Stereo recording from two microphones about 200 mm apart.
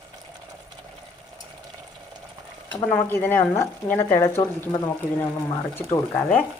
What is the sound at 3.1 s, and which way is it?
Speech, 10° left (ahead or behind).